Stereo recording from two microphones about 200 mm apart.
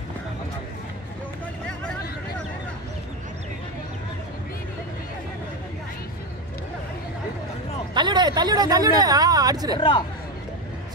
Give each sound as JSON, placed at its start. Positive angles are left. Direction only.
{"t": 7.9, "sound": "speech", "side_deg": -20}
{"t": 9.8, "sound": "speech", "side_deg": 25}